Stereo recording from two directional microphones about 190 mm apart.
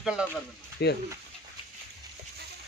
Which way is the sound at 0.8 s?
60° left (ahead or behind).